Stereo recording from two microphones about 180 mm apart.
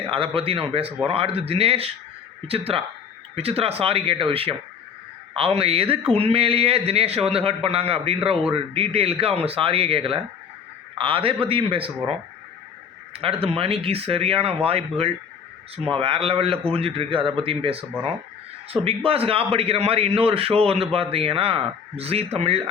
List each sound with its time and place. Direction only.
0.1 s a man's voice: 30° right (ahead or behind)
13.2 s a man's voice: 30° right (ahead or behind)